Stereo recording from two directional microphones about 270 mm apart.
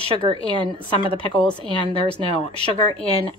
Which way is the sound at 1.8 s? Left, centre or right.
Centre.